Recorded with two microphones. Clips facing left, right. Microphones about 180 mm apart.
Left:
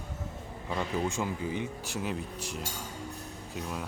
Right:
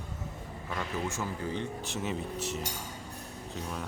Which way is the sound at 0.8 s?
15° left (ahead or behind).